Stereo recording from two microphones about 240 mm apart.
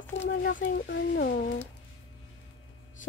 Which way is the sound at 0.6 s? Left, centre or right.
Left.